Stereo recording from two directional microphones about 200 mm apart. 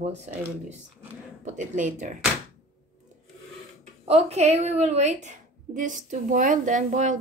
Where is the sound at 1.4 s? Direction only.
35° right (ahead or behind).